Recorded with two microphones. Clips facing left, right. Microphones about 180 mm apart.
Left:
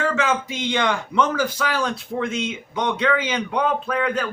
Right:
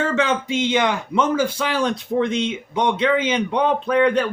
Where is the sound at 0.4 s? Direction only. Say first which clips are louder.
Right 3 dB; 20° right (ahead or behind).